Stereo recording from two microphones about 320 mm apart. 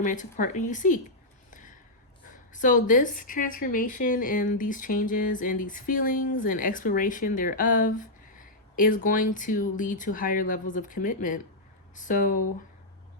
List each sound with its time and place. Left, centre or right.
0.0 s speech: left
2.5 s speech: left